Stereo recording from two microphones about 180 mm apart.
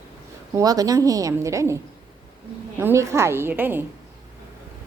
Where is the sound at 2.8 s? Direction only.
15° right (ahead or behind).